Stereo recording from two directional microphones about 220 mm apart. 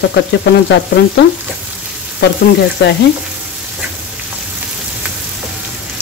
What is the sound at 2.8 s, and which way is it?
Stir, 50° left (ahead or behind).